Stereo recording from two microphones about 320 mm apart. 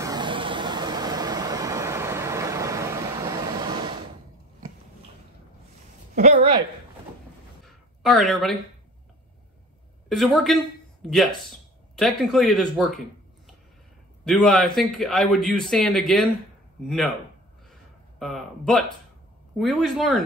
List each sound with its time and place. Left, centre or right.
0.0 s vehicle: centre
6.1 s a sound: right
7.6 s a sound: centre
10.0 s speech: centre
14.2 s speech: centre
18.2 s speech: centre